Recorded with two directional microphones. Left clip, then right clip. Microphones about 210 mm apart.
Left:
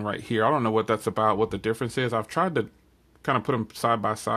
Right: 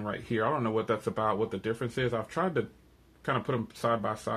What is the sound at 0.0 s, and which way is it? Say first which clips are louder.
Speech: left 6 dB; 45° left (ahead or behind).